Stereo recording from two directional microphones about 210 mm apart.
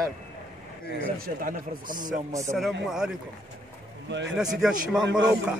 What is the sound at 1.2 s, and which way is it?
Speech, 40° right (ahead or behind).